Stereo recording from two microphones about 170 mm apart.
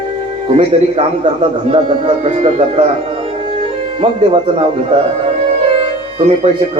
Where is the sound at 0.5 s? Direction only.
30° right (ahead or behind).